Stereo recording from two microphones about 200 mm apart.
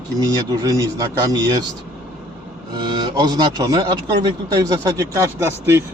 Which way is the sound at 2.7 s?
20° right (ahead or behind).